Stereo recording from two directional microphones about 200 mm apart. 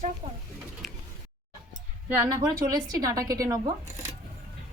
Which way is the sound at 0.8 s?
Centre (ahead or behind).